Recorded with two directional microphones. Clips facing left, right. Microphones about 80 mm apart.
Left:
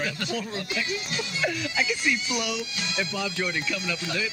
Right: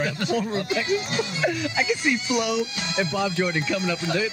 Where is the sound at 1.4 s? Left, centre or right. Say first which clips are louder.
Right 1 dB; right.